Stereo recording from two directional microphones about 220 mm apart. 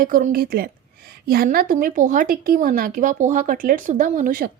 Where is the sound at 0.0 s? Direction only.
40° right (ahead or behind).